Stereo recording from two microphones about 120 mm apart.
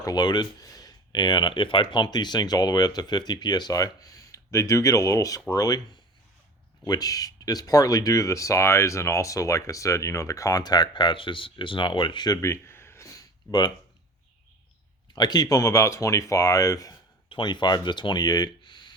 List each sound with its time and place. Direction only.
0.0 s speech: 35° left (ahead or behind)
15.1 s speech: 35° left (ahead or behind)
17.2 s speech: 40° left (ahead or behind)